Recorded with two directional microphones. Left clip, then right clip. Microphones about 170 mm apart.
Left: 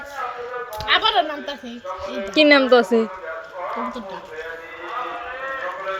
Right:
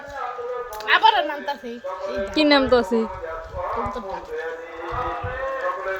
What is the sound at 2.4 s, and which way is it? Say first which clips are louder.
Speech: left 4 dB; 5° left (ahead or behind).